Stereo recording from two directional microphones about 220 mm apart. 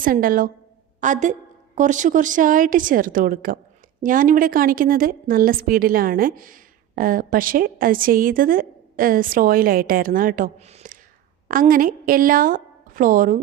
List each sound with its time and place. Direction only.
0.0 s a woman's voice: 40° right (ahead or behind)